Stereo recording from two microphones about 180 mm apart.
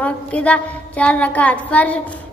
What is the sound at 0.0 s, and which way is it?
A woman's voice, 5° left (ahead or behind).